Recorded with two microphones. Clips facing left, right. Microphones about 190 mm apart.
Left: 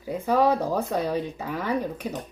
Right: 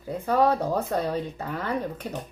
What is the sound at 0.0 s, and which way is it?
Speech, 10° left (ahead or behind).